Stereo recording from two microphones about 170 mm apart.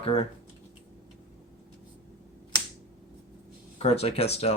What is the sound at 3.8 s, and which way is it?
Speech, 40° left (ahead or behind).